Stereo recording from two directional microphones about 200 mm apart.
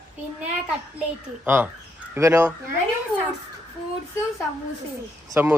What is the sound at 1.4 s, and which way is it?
A woman's voice, 10° right (ahead or behind).